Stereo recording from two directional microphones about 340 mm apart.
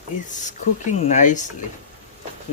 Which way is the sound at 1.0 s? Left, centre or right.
Left.